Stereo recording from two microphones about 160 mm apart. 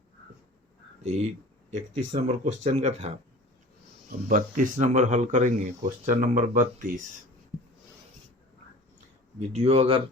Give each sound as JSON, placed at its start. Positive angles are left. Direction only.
{"t": 1.0, "sound": "speech", "side_deg": -45}
{"t": 4.3, "sound": "speech", "side_deg": -55}
{"t": 9.4, "sound": "speech", "side_deg": -45}